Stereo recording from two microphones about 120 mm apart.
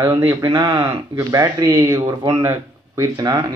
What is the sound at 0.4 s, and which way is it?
Speech, 30° right (ahead or behind).